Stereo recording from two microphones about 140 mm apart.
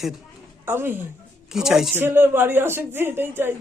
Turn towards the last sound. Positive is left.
turn(degrees=-15)  # may be behind; listen again after turning